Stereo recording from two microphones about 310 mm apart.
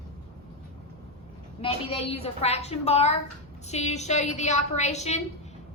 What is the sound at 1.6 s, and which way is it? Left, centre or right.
A woman's voice, centre.